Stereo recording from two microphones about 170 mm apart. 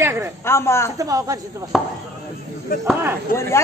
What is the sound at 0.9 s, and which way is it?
Speech, 20° right (ahead or behind).